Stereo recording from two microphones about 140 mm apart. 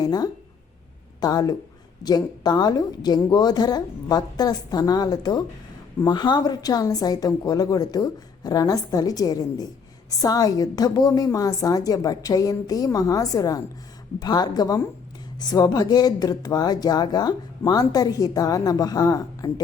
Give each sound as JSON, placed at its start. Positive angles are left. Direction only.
{"t": 0.0, "sound": "speech", "side_deg": 30}